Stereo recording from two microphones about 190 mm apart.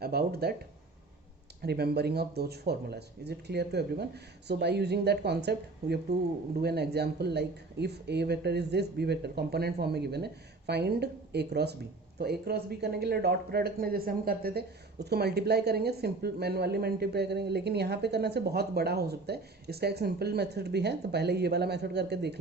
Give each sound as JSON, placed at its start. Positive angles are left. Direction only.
{"t": 0.0, "sound": "speech", "side_deg": -55}
{"t": 1.6, "sound": "speech", "side_deg": -55}